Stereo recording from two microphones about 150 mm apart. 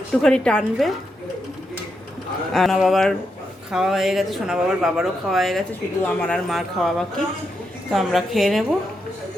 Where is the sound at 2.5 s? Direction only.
Centre (ahead or behind).